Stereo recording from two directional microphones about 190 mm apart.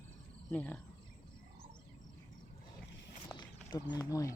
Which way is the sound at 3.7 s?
20° left (ahead or behind).